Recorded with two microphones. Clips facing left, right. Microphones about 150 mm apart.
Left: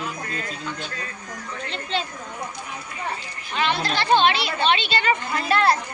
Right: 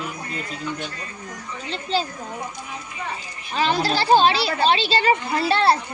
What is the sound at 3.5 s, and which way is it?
A woman's voice, 35° right (ahead or behind).